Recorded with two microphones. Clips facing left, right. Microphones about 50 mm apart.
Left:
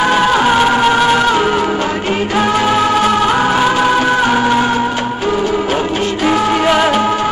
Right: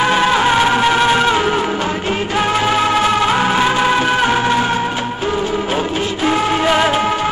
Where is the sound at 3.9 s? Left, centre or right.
Centre.